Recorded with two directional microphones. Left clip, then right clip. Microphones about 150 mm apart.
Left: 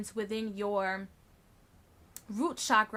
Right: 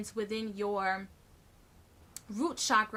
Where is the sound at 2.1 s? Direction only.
55° left (ahead or behind).